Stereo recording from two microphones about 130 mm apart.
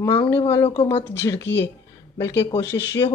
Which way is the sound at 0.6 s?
50° left (ahead or behind).